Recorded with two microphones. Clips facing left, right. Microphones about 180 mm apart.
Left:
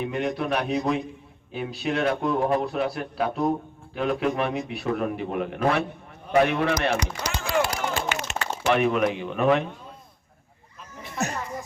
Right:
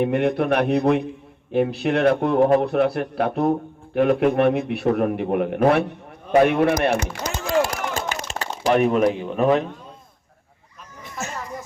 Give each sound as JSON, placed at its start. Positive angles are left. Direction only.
{"t": 0.0, "sound": "a man's voice", "side_deg": -60}
{"t": 6.4, "sound": "a sound", "side_deg": -55}
{"t": 9.1, "sound": "speech", "side_deg": -35}